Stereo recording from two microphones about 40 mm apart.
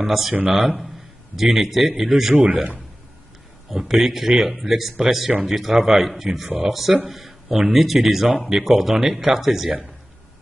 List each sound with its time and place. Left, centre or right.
0.0 s a man's voice: centre
2.3 s a man's voice: right
3.7 s speech: centre
7.1 s a sound: centre
7.7 s speech: centre